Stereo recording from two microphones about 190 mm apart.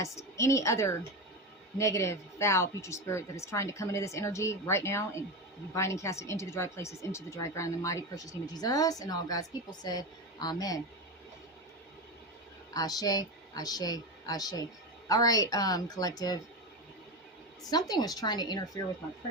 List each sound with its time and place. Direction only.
0.0 s speech: 15° left (ahead or behind)
12.7 s speech: 20° left (ahead or behind)
17.6 s speech: 20° left (ahead or behind)